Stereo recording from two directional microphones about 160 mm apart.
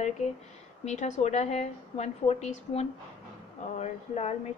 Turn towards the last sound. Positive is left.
turn(degrees=45)  # may be behind; listen again after turning